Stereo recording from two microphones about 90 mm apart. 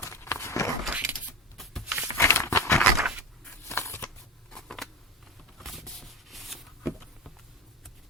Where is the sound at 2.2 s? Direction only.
30° left (ahead or behind).